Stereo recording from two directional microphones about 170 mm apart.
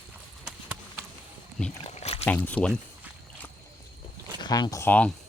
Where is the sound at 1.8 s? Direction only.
35° left (ahead or behind).